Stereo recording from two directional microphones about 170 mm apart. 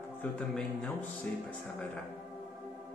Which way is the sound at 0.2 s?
5° left (ahead or behind).